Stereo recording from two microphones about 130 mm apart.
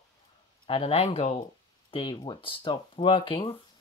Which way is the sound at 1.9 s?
40° left (ahead or behind).